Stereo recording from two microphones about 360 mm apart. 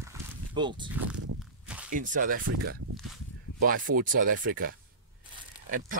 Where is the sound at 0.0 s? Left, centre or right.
Centre.